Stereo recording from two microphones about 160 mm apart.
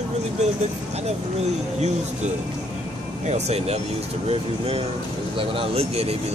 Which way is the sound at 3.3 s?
40° right (ahead or behind).